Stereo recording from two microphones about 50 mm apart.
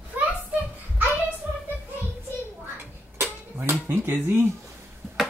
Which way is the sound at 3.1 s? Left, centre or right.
Right.